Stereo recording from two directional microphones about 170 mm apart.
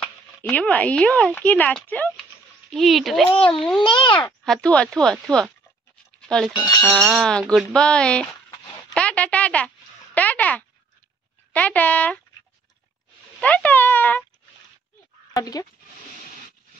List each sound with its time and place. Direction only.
0.0 s speech: 10° left (ahead or behind)
3.3 s a child's voice: 30° left (ahead or behind)
3.5 s speech: 5° left (ahead or behind)
3.8 s a child's voice: 30° left (ahead or behind)
4.5 s speech: 5° left (ahead or behind)
8.9 s a sound: 5° left (ahead or behind)
11.5 s speech: 10° left (ahead or behind)
13.4 s a sound: 10° left (ahead or behind)
15.3 s speech: 20° left (ahead or behind)